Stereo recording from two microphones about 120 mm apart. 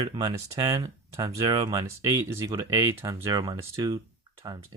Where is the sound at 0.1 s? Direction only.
40° right (ahead or behind).